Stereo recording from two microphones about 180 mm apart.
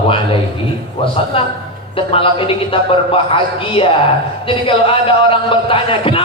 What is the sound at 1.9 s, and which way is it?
Speech, 30° left (ahead or behind).